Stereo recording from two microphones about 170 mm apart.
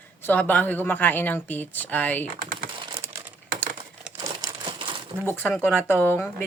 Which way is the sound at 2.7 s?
25° right (ahead or behind).